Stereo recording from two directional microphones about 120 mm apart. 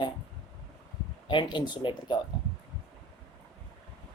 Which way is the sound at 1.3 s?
40° left (ahead or behind).